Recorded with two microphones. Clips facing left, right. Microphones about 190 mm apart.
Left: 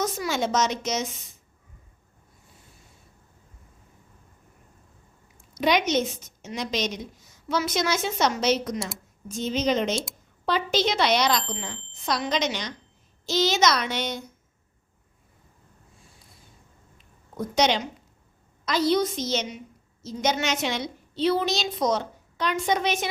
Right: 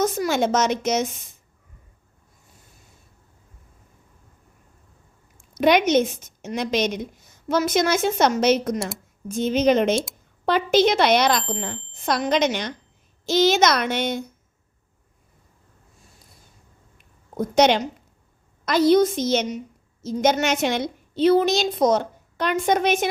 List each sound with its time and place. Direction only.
0.0 s speech: 50° right (ahead or behind)
5.5 s a woman's voice: 55° right (ahead or behind)
17.0 s a sound: 55° right (ahead or behind)
18.6 s a woman's voice: 55° right (ahead or behind)